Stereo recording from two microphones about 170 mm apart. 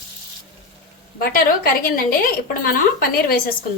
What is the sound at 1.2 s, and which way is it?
A woman's voice, 60° left (ahead or behind).